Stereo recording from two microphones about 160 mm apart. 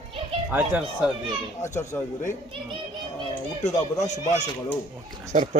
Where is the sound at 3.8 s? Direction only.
45° left (ahead or behind).